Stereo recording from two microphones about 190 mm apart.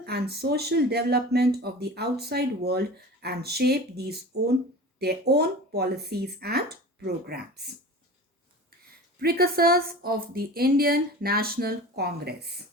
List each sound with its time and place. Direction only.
0.0 s speech: 55° right (ahead or behind)
9.1 s a woman's voice: 50° right (ahead or behind)